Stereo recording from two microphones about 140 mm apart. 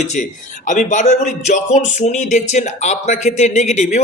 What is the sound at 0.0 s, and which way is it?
Speech, 60° left (ahead or behind).